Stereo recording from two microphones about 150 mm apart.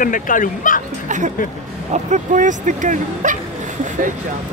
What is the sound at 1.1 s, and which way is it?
Speech, 55° right (ahead or behind).